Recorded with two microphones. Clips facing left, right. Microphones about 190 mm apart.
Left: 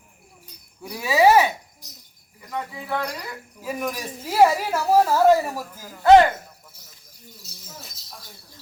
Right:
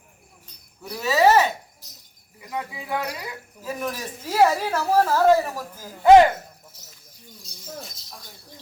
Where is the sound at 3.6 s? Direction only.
10° left (ahead or behind).